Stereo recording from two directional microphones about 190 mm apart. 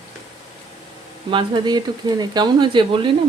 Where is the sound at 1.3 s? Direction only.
25° right (ahead or behind).